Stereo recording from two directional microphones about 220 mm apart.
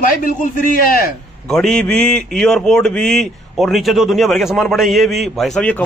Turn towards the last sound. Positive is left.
turn(degrees=5)  # may be behind; listen again after turning